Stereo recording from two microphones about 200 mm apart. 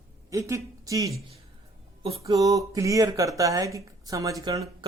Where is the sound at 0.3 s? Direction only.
15° right (ahead or behind).